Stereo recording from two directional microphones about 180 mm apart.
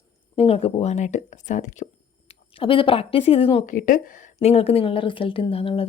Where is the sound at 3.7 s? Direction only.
45° left (ahead or behind); by 5.8 s 30° left (ahead or behind).